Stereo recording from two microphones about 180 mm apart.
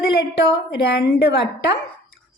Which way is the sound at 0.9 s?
60° left (ahead or behind).